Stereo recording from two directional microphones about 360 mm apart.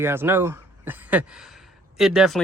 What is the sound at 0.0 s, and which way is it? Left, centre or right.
Speech, centre.